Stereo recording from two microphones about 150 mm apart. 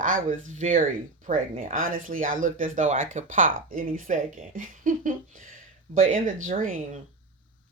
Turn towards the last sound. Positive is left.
turn(degrees=-65)  # may be behind; listen again after turning